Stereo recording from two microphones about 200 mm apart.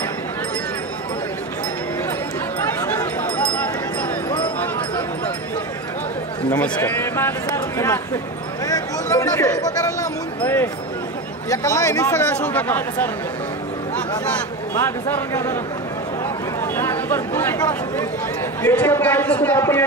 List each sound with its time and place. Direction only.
3.0 s a sound: 10° left (ahead or behind)
6.5 s speech: 10° left (ahead or behind)
8.6 s a sound: 15° left (ahead or behind)
10.4 s speech: 10° left (ahead or behind)
15.0 s speech: 10° left (ahead or behind)
16.7 s speech: 10° left (ahead or behind)